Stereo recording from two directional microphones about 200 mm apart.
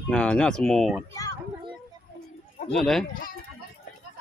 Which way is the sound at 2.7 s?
Centre (ahead or behind).